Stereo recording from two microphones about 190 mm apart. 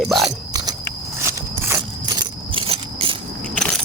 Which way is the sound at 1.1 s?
15° right (ahead or behind).